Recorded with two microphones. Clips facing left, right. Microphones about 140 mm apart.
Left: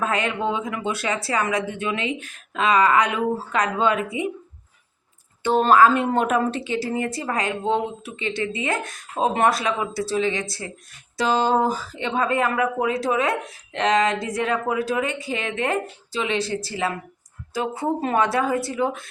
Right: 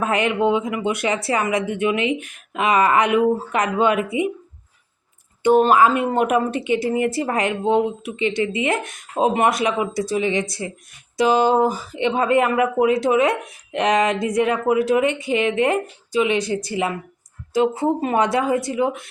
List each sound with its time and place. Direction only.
0.0 s speech: 20° right (ahead or behind)
5.4 s a woman's voice: 15° right (ahead or behind)